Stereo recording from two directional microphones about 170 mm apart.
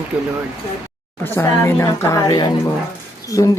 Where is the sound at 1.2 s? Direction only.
15° left (ahead or behind).